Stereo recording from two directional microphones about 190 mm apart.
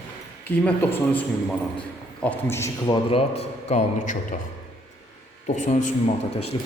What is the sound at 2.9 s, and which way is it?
A man's voice, 30° left (ahead or behind).